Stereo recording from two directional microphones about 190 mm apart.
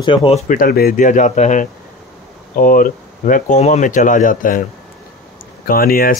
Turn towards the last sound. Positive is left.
turn(degrees=50)  # may be behind; listen again after turning